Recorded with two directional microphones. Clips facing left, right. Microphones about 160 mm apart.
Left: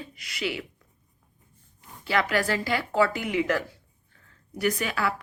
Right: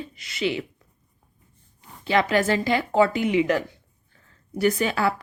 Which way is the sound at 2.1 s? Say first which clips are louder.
Right 4 dB; 25° right (ahead or behind).